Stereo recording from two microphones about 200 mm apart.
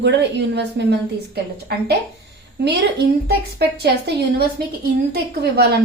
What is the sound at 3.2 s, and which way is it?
A woman's voice, 55° right (ahead or behind).